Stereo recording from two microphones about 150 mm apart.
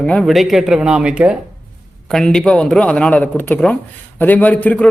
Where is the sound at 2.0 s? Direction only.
5° left (ahead or behind).